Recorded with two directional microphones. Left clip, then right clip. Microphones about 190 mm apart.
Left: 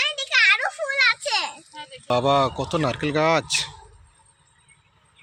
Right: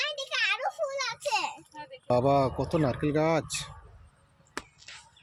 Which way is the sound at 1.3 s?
10° right (ahead or behind).